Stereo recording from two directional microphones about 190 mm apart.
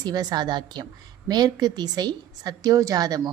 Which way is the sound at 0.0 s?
20° right (ahead or behind).